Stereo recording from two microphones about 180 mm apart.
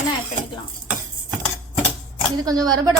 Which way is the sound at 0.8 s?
5° right (ahead or behind).